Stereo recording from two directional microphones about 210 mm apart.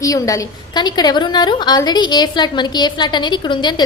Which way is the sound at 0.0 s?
15° left (ahead or behind).